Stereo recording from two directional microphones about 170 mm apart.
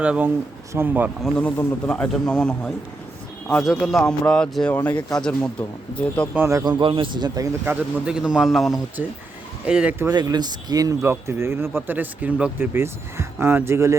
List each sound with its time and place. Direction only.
0.0 s speech: 5° right (ahead or behind)
1.2 s speech: 10° left (ahead or behind)
6.3 s speech: 15° right (ahead or behind)
6.7 s a man's voice: 30° right (ahead or behind)
7.6 s speech: 10° right (ahead or behind)
10.1 s speech: 25° right (ahead or behind)